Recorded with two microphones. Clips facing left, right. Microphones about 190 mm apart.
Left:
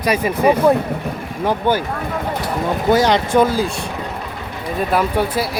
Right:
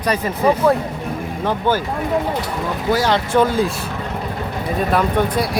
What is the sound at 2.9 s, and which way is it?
Speech, 20° left (ahead or behind).